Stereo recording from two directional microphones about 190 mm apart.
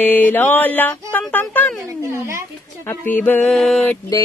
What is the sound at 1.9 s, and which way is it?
Speech, 15° right (ahead or behind).